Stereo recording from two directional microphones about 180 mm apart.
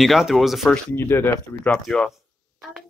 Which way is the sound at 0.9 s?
10° left (ahead or behind).